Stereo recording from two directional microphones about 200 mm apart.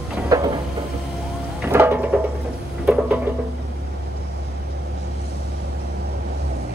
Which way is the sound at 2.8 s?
5° right (ahead or behind).